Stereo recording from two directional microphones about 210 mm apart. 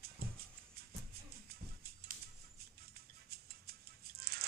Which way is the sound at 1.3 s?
45° right (ahead or behind).